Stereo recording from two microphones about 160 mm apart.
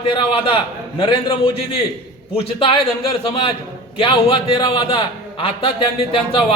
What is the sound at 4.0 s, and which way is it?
A man's voice, 35° left (ahead or behind).